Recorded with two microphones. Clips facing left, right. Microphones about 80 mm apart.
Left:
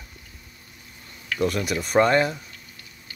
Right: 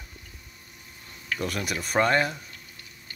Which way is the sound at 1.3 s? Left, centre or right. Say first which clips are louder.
Left 6 dB; centre.